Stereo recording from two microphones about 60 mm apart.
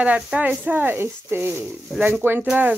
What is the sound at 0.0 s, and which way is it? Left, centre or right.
Speech, right.